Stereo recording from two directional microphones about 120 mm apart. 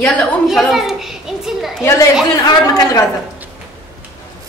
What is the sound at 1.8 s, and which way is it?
Speech, 25° left (ahead or behind).